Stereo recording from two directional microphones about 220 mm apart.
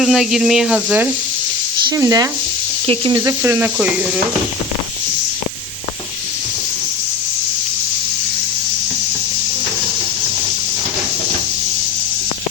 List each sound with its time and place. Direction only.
0.0 s speech: centre (ahead or behind)